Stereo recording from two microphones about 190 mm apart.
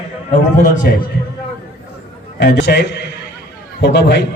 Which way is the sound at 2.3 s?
60° left (ahead or behind).